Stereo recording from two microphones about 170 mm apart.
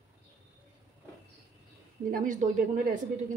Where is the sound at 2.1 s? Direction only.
50° right (ahead or behind).